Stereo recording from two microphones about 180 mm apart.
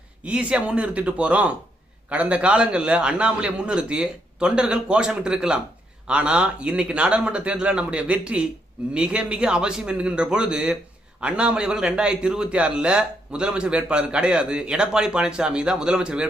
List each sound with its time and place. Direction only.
0.3 s a man's voice: 5° right (ahead or behind)